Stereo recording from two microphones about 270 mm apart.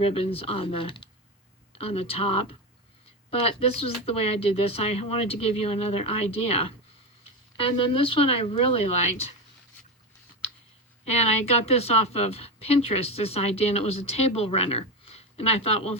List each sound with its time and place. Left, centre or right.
0.2 s a woman's voice: left
11.0 s a woman's voice: left